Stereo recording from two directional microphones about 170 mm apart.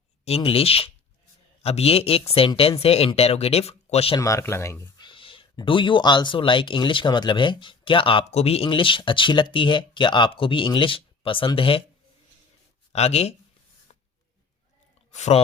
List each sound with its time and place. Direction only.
0.3 s speech: 35° left (ahead or behind)
4.2 s speech: 15° left (ahead or behind)
5.0 s speech: 30° left (ahead or behind)
12.9 s speech: 40° left (ahead or behind)
15.1 s speech: 40° left (ahead or behind)